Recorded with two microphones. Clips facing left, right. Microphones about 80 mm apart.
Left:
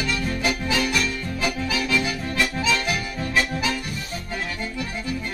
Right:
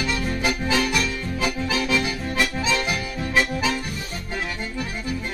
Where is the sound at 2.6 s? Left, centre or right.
Right.